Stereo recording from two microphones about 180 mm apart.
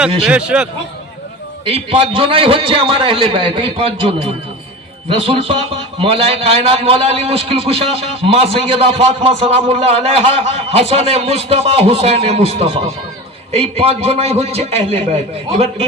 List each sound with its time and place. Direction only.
0.3 s speech: 5° right (ahead or behind)
1.7 s a man's voice: 30° right (ahead or behind)
5.0 s a man's voice: 30° right (ahead or behind)